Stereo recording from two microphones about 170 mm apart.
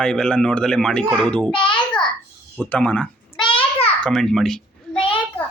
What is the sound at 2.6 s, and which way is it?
Speech, 10° left (ahead or behind).